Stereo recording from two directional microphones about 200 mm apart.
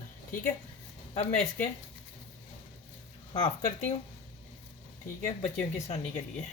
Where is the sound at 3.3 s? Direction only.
20° left (ahead or behind).